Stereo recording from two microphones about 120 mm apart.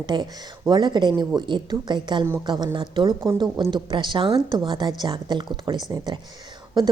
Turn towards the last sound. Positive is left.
turn(degrees=-35)  # may be behind; listen again after turning